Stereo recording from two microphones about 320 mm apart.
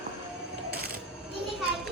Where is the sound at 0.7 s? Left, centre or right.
Right.